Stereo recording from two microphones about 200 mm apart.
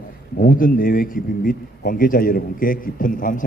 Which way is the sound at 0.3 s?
45° left (ahead or behind).